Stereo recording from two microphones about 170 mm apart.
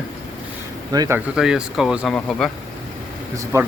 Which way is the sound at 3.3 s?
15° right (ahead or behind).